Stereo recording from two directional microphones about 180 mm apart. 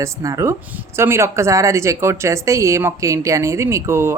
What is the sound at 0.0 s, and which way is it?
A woman's voice, 15° right (ahead or behind).